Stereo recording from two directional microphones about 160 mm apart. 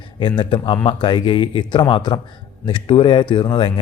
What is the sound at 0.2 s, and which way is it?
A man's voice, 30° left (ahead or behind).